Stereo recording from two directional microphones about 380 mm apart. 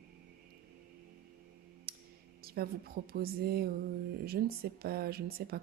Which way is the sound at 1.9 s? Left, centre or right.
Right.